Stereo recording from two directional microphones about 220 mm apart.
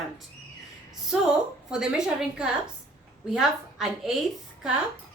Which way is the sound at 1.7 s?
5° right (ahead or behind).